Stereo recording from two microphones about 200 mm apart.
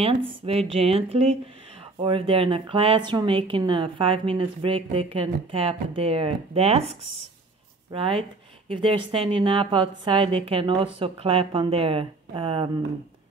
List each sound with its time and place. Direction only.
0.0 s speech: 30° right (ahead or behind)